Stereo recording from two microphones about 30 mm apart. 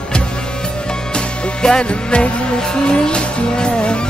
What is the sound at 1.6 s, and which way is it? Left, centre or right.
Music, left.